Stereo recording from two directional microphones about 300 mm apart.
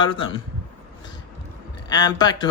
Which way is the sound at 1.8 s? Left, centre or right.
Centre.